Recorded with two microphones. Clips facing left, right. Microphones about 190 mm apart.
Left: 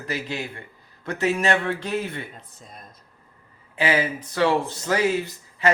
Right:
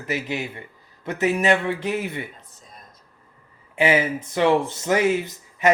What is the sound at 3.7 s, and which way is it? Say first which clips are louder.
Speech: right 3 dB; 25° right (ahead or behind).